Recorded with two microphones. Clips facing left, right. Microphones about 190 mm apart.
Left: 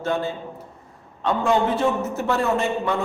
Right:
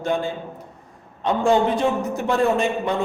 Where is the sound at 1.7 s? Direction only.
15° right (ahead or behind).